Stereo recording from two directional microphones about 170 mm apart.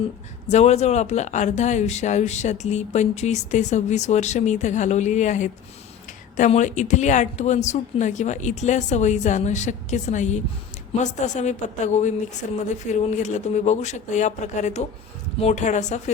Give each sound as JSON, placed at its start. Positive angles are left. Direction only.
{"t": 0.4, "sound": "speech", "side_deg": 40}